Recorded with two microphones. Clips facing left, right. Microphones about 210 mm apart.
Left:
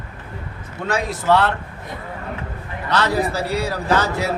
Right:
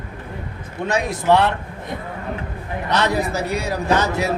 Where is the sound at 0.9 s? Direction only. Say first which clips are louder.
Right 1 dB; 15° right (ahead or behind).